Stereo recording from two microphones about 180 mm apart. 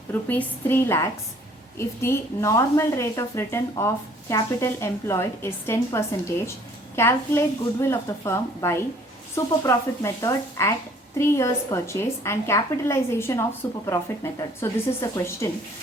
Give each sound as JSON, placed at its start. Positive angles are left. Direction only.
{"t": 0.1, "sound": "a woman's voice", "side_deg": 10}